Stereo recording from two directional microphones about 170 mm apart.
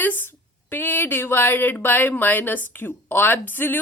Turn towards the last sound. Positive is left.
turn(degrees=10)  # may be behind; listen again after turning